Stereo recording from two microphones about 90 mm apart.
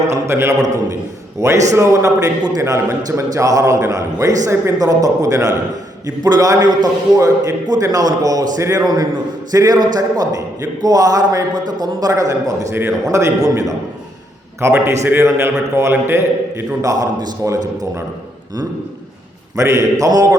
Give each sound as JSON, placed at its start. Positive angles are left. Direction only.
{"t": 0.1, "sound": "a man's voice", "side_deg": -30}
{"t": 14.6, "sound": "a man's voice", "side_deg": -25}
{"t": 16.8, "sound": "a man's voice", "side_deg": -40}
{"t": 19.5, "sound": "a man's voice", "side_deg": -35}